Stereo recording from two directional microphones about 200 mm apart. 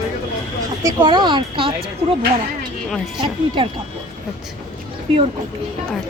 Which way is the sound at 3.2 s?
25° right (ahead or behind).